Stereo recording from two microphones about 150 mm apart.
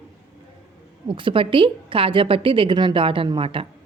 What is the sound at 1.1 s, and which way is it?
A woman's voice, 35° right (ahead or behind).